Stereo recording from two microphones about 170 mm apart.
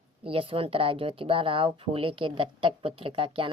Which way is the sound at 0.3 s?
30° right (ahead or behind).